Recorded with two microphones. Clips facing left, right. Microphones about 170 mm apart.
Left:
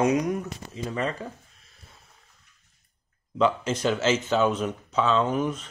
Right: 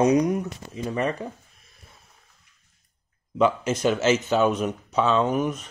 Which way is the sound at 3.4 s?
15° right (ahead or behind).